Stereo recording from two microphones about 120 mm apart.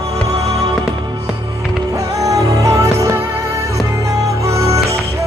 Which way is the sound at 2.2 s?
25° right (ahead or behind).